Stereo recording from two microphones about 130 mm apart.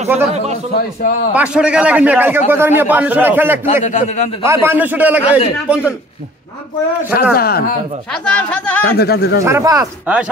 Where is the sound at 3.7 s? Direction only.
80° left; by 4.3 s 60° left (ahead or behind).